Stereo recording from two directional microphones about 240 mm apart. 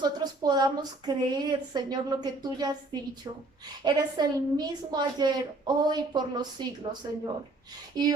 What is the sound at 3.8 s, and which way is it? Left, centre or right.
A woman's voice, centre.